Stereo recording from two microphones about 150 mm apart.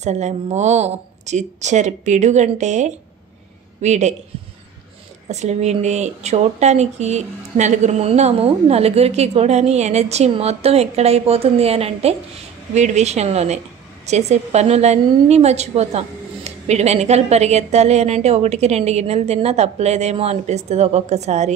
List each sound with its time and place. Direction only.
0.0 s a woman's voice: 50° right (ahead or behind)
5.3 s a woman's voice: 50° right (ahead or behind)